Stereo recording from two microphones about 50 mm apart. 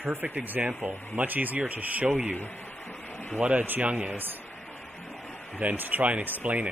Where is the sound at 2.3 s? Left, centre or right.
Left.